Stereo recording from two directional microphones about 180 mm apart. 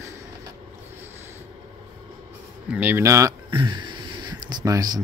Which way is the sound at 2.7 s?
10° right (ahead or behind).